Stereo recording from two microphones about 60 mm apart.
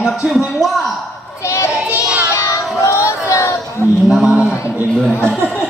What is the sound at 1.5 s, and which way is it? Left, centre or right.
Child singing, left.